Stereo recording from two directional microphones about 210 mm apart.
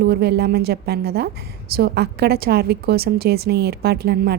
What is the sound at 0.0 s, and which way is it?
A woman's voice, 50° right (ahead or behind).